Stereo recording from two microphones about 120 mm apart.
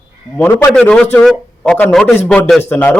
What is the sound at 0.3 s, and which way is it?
Speech, 30° left (ahead or behind).